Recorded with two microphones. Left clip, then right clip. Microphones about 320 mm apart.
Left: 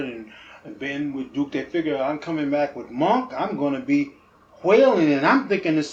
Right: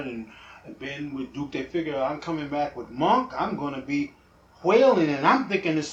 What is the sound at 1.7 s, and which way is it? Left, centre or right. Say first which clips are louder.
Speech: left 3 dB; centre.